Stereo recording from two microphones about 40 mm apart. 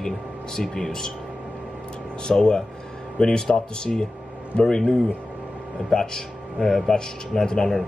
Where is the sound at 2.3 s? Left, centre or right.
Left.